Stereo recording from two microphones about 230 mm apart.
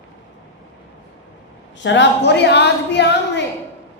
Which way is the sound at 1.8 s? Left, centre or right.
Left.